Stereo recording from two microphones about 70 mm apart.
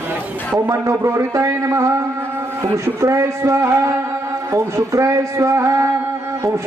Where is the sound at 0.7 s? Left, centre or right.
Right.